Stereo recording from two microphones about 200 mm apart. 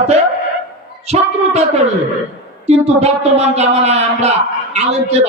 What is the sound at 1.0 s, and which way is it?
Speech, 30° right (ahead or behind).